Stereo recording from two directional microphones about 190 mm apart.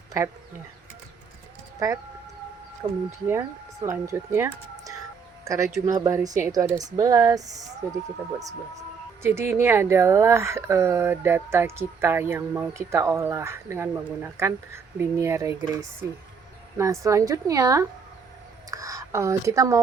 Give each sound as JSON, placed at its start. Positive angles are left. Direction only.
{"t": 2.8, "sound": "speech", "side_deg": -20}
{"t": 9.2, "sound": "speech", "side_deg": -15}